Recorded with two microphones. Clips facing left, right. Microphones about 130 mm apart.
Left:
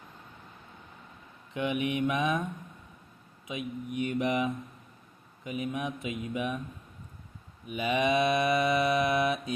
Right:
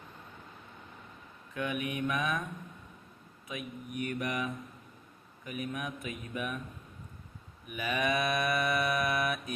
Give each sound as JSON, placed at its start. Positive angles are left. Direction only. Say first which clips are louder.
{"t": 1.5, "sound": "mantra", "louder": "left 5 dB", "side_deg": 20}
{"t": 3.4, "sound": "mantra", "louder": "left 5 dB", "side_deg": 20}
{"t": 7.7, "sound": "mantra", "louder": "left 5 dB", "side_deg": 20}